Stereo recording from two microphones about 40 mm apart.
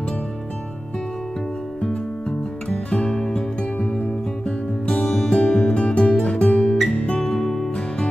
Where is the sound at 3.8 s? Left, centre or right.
Left.